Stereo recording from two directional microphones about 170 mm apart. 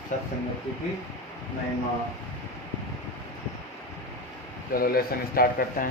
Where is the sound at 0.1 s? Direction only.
45° left (ahead or behind).